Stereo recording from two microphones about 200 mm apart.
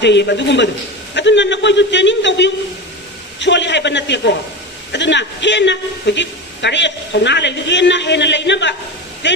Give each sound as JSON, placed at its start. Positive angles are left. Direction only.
{"t": 0.0, "sound": "a man's voice", "side_deg": 60}